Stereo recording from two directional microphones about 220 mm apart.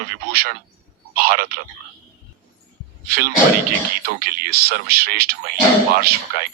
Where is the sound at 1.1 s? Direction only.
40° right (ahead or behind).